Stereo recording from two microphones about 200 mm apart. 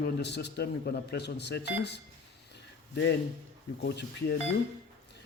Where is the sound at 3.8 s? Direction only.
55° left (ahead or behind).